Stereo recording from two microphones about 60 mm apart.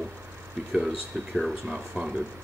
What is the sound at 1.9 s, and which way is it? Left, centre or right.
Speech, right.